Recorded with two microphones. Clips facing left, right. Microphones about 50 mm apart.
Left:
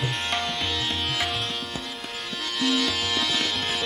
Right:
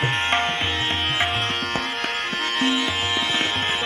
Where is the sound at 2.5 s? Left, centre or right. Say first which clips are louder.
Right 1 dB; right.